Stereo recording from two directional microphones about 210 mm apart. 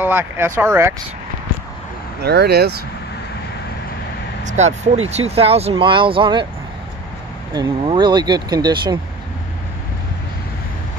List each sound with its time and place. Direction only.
0.0 s speech: 10° right (ahead or behind)
2.2 s speech: 50° right (ahead or behind)
4.5 s speech: 35° right (ahead or behind)
7.5 s speech: 20° right (ahead or behind)